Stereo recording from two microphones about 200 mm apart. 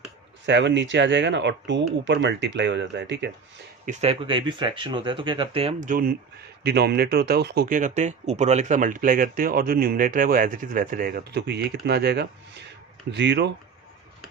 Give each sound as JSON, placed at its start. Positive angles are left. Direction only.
{"t": 0.4, "sound": "speech", "side_deg": -65}
{"t": 3.8, "sound": "speech", "side_deg": -30}
{"t": 6.6, "sound": "speech", "side_deg": -55}